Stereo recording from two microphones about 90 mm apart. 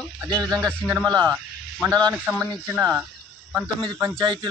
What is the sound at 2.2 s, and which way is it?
Speech, 20° right (ahead or behind).